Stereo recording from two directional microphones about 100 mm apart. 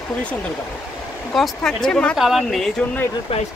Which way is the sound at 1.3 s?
5° left (ahead or behind).